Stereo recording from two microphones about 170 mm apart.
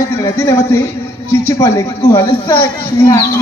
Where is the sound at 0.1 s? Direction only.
15° left (ahead or behind).